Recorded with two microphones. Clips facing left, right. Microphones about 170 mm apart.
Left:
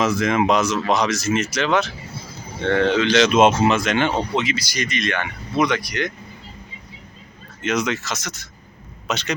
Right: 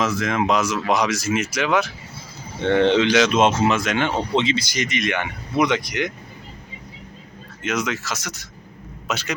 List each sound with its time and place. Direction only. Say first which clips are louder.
0.0 s speech: left 3 dB; centre (ahead or behind)
2.6 s speech: right 2 dB; 20° right (ahead or behind)
3.2 s speech: left 2 dB; 5° left (ahead or behind)
4.4 s speech: right 2 dB; 25° right (ahead or behind)
7.6 s a man's voice: left 2 dB; 5° right (ahead or behind)